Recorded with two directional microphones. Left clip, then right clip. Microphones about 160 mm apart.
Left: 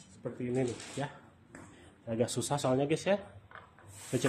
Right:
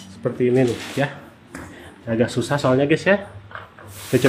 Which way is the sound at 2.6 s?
20° left (ahead or behind).